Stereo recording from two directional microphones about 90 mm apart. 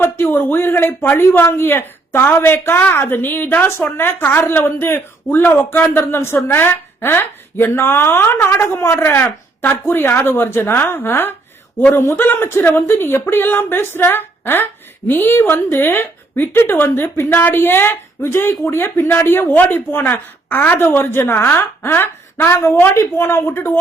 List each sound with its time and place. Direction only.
0.0 s a man's voice: 25° left (ahead or behind)